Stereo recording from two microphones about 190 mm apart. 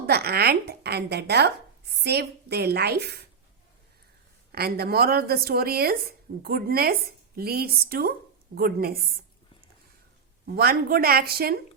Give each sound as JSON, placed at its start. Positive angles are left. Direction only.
{"t": 0.0, "sound": "speech", "side_deg": -55}
{"t": 4.5, "sound": "a woman's voice", "side_deg": -55}
{"t": 10.4, "sound": "a woman's voice", "side_deg": -55}